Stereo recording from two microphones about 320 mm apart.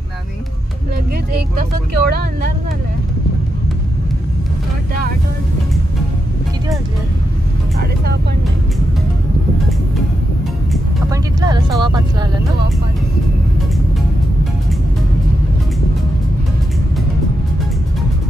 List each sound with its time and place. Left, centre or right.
1.6 s speech: right
11.1 s speech: centre